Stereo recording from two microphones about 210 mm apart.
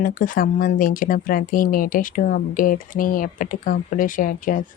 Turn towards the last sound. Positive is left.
turn(degrees=40)  # may be behind; listen again after turning